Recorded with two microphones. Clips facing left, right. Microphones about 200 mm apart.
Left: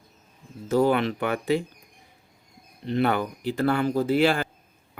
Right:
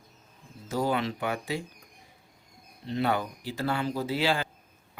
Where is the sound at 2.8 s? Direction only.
60° left (ahead or behind).